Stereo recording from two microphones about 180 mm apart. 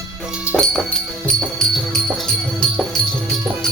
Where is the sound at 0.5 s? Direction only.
5° left (ahead or behind).